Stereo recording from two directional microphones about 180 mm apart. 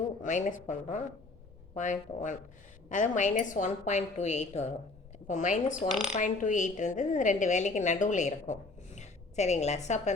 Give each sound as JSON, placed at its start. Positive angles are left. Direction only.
{"t": 0.2, "sound": "a woman's voice", "side_deg": 45}